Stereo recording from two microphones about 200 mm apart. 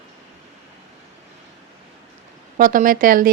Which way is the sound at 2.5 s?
40° right (ahead or behind).